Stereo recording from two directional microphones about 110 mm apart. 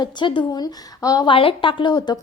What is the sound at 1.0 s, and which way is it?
Speech, 30° left (ahead or behind).